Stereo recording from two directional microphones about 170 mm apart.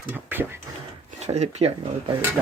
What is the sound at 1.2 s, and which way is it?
Speech, 40° right (ahead or behind).